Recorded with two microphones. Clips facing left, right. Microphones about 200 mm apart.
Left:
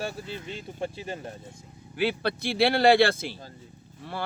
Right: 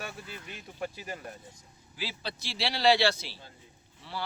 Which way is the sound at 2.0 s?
60° left (ahead or behind).